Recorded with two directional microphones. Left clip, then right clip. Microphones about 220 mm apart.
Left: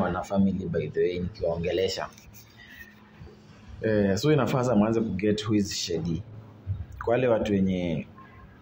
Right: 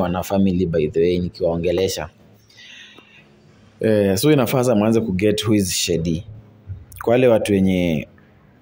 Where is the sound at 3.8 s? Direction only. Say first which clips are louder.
Right 8 dB; 45° right (ahead or behind).